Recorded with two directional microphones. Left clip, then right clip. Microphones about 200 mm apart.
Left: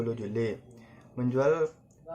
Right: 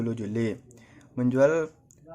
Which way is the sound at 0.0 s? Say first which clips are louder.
Right 1 dB; 50° right (ahead or behind).